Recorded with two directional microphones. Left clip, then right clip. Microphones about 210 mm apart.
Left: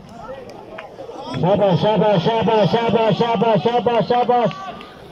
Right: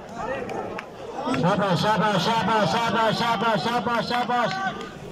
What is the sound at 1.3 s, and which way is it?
A man's voice, 25° left (ahead or behind).